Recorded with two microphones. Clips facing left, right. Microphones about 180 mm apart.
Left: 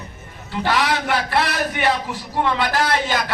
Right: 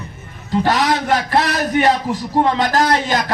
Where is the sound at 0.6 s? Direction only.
40° right (ahead or behind).